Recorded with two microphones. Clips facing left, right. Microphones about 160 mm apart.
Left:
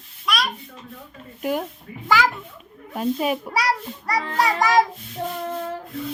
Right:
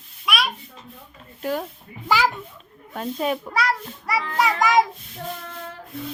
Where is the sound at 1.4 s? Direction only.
15° left (ahead or behind).